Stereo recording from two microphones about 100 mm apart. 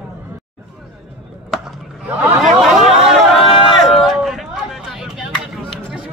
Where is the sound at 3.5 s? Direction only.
55° left (ahead or behind).